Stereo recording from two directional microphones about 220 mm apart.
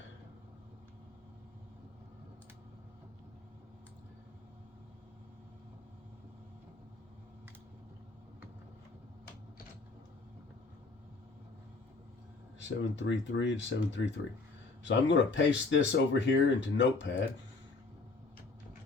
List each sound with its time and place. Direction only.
12.5 s speech: 55° left (ahead or behind)